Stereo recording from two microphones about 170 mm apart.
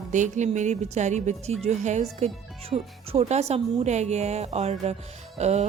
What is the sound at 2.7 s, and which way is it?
Music, 40° right (ahead or behind).